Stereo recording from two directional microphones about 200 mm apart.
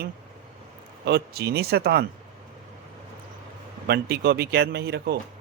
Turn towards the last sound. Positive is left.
turn(degrees=-55)  # may be behind; listen again after turning